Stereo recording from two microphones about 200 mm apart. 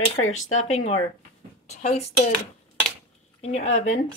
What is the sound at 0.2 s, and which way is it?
Speech, 90° left.